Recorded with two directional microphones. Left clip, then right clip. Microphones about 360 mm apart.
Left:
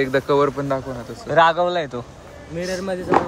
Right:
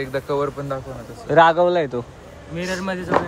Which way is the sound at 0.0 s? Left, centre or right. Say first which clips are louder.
Left 5 dB; left.